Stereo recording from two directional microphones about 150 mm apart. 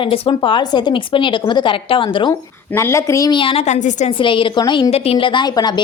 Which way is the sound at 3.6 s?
50° left (ahead or behind).